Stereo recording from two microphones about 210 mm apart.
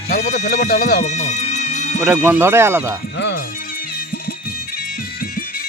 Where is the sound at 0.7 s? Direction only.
50° left (ahead or behind).